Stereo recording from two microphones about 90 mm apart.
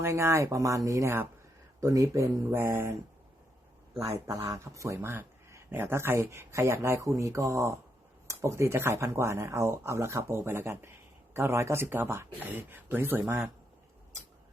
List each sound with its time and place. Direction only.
0.0 s speech: 30° right (ahead or behind)
3.9 s speech: 30° right (ahead or behind)